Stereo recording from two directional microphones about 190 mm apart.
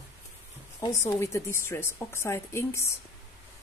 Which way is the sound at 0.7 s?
15° left (ahead or behind).